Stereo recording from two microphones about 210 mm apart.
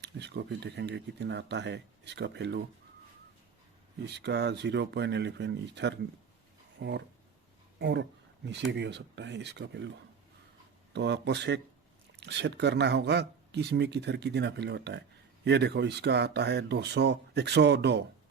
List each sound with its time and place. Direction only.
0.0 s speech: 55° right (ahead or behind)
4.0 s speech: 55° right (ahead or behind)
10.9 s speech: 55° right (ahead or behind)